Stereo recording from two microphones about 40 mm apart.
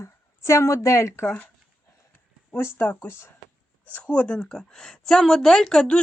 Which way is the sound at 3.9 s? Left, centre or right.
Left.